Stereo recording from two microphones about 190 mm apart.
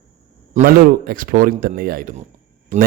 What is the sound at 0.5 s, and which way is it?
A man's voice, 50° right (ahead or behind).